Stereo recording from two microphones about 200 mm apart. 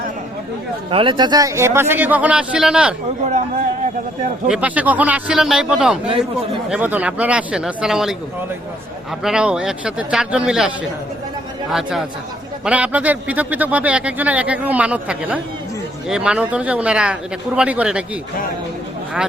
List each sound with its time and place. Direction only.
0.9 s a man's voice: 25° right (ahead or behind); by 2.9 s 5° right (ahead or behind)
3.2 s a man's voice: 40° right (ahead or behind)
4.4 s speech: 5° right (ahead or behind)
9.2 s speech: 5° right (ahead or behind)
11.7 s a man's voice: centre (ahead or behind)